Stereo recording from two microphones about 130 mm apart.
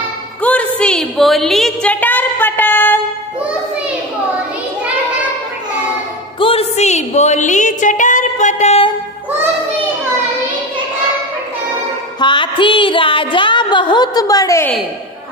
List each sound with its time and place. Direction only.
0.4 s a sound: 10° left (ahead or behind)
6.4 s a woman's voice: 50° left (ahead or behind)
12.2 s music: 40° left (ahead or behind)